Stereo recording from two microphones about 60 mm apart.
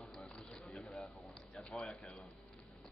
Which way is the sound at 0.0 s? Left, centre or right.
Centre.